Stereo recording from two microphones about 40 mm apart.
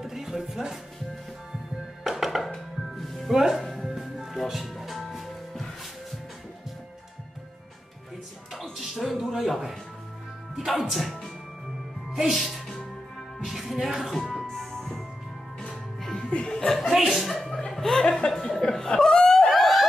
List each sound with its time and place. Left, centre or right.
0.0 s music: centre
2.0 s music: centre
3.3 s speech: centre
3.7 s music: centre
8.7 s a sound: centre
10.5 s music: centre
12.2 s music: centre
14.3 s music: centre
16.3 s chuckle: left
16.5 s music: centre
16.9 s music: centre
17.3 s music: centre
18.3 s chuckle: centre